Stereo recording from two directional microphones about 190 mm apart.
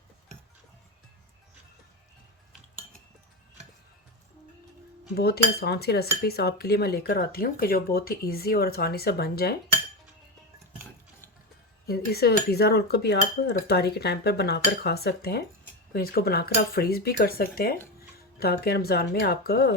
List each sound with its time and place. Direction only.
5.1 s cutlery: 55° left (ahead or behind)
11.9 s cutlery: 55° left (ahead or behind)
15.9 s speech: 55° left (ahead or behind)
18.3 s cutlery: 55° left (ahead or behind)